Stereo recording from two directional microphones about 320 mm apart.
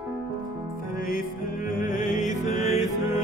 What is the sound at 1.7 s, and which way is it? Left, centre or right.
Music, left.